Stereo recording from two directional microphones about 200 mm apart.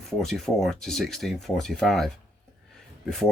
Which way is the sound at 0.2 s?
Centre (ahead or behind).